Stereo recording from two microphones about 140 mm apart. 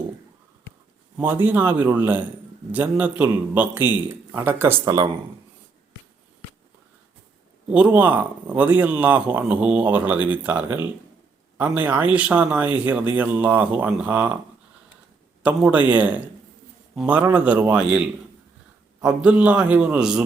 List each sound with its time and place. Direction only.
1.1 s speech: 15° right (ahead or behind)
7.7 s speech: 10° right (ahead or behind)
15.4 s speech: 10° right (ahead or behind)